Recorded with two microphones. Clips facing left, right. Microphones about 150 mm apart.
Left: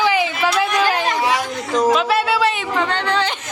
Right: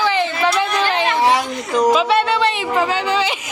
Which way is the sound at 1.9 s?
Centre (ahead or behind).